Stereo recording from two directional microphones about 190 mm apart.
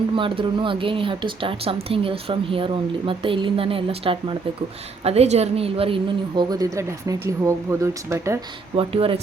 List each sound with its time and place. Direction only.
0.2 s speech: 25° right (ahead or behind)
8.7 s speech: 30° right (ahead or behind)